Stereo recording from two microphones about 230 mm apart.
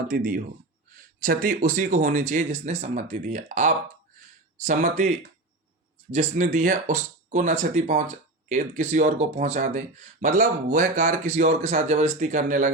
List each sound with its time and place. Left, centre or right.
0.1 s speech: right